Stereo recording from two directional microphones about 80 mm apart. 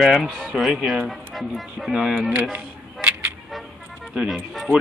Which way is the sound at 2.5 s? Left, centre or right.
Right.